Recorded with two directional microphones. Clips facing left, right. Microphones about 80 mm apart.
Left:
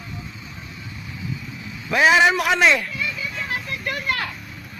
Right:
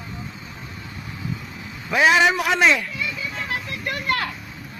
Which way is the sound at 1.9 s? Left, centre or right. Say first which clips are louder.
Left 1 dB; centre.